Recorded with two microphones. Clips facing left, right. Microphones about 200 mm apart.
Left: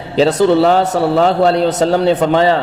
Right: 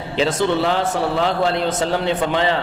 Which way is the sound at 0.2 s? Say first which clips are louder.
Left 8 dB; 40° left (ahead or behind).